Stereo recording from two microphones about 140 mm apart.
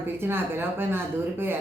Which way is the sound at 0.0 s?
15° right (ahead or behind).